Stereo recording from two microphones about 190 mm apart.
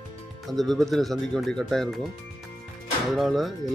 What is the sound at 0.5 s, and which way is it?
Speech, centre (ahead or behind).